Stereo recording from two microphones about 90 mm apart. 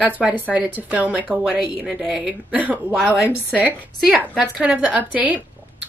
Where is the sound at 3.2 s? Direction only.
20° right (ahead or behind).